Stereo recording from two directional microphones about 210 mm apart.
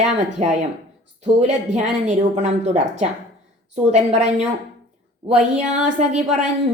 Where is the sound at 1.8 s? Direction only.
35° right (ahead or behind).